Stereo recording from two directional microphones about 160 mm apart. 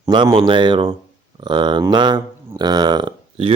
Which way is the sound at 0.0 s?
25° right (ahead or behind).